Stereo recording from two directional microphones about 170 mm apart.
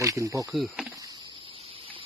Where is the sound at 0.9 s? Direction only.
20° right (ahead or behind).